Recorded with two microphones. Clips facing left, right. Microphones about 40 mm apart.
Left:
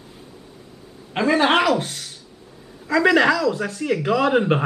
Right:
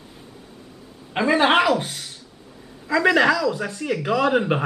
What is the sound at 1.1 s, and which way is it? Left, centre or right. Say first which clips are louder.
Speech: even; centre.